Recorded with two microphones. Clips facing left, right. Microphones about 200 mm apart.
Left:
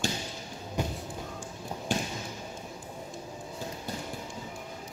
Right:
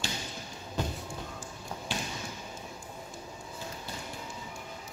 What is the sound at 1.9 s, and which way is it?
Basketball bounce, 45° left (ahead or behind).